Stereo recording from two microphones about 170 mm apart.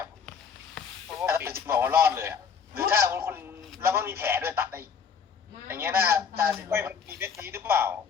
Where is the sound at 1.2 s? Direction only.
15° right (ahead or behind).